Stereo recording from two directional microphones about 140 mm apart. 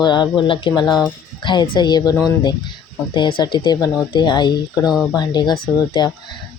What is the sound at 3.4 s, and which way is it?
Speech, 30° left (ahead or behind).